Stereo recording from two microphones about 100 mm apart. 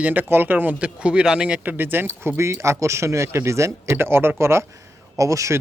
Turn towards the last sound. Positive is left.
turn(degrees=-30)  # may be behind; listen again after turning